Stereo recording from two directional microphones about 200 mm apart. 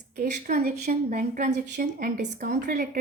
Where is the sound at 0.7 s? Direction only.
50° right (ahead or behind).